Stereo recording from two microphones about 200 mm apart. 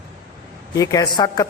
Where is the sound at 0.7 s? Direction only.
15° left (ahead or behind).